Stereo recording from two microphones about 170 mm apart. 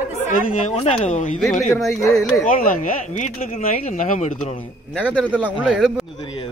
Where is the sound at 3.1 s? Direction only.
45° left (ahead or behind).